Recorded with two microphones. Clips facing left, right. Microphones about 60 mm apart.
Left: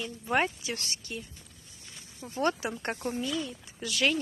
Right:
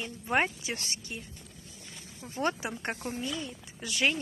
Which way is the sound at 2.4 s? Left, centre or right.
Right.